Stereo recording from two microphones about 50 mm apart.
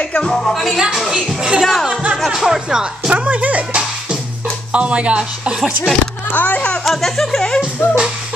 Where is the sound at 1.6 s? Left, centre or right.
Centre.